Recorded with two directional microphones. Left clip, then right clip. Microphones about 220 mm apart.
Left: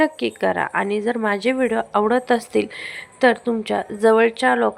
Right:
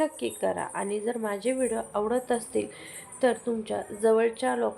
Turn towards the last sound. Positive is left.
turn(degrees=20)  # may be behind; listen again after turning